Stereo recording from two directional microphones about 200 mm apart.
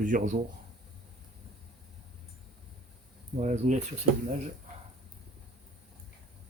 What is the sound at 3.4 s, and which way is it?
Speech, 35° right (ahead or behind).